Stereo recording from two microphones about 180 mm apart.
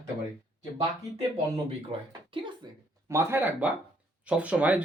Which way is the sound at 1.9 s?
30° right (ahead or behind).